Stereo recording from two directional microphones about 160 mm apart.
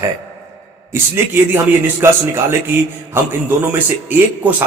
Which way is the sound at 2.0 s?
15° right (ahead or behind).